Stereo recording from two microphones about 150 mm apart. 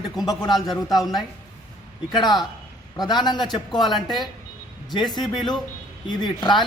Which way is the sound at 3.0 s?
30° left (ahead or behind).